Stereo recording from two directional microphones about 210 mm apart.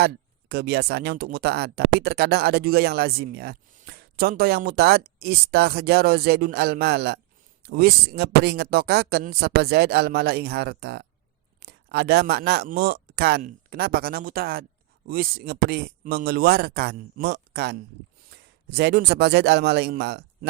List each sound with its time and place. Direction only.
0.0 s a man's voice: 50° right (ahead or behind)